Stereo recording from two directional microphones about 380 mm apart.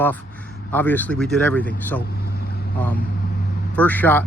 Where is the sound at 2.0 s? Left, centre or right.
Left.